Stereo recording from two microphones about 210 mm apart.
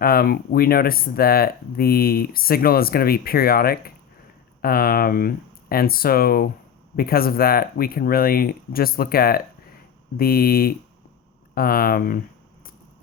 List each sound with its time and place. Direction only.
0.0 s speech: 45° left (ahead or behind)